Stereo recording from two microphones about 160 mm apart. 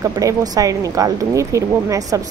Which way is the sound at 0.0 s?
20° right (ahead or behind).